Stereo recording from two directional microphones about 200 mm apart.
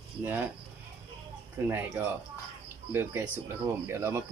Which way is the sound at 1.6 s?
10° right (ahead or behind).